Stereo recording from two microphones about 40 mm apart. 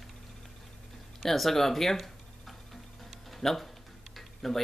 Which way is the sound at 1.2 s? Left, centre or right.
Centre.